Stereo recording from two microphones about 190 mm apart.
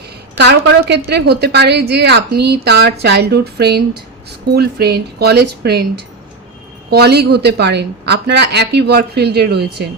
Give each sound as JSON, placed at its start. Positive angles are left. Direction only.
{"t": 0.3, "sound": "a woman's voice", "side_deg": -65}